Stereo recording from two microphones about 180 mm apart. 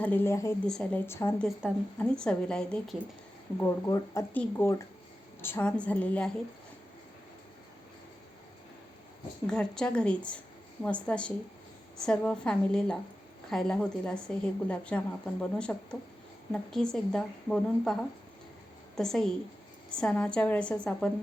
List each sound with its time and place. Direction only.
0.0 s a woman's voice: 10° left (ahead or behind)
3.6 s speech: 20° left (ahead or behind)
9.5 s a woman's voice: 5° left (ahead or behind)
18.9 s a woman's voice: 5° left (ahead or behind)